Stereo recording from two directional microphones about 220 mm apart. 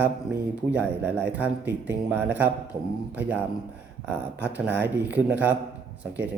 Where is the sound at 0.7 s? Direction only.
10° right (ahead or behind).